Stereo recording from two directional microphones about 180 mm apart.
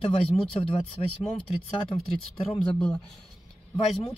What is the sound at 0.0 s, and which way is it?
Speech, 30° left (ahead or behind).